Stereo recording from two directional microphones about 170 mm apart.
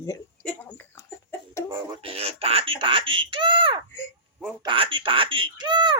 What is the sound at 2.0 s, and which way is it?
Speech, 35° right (ahead or behind).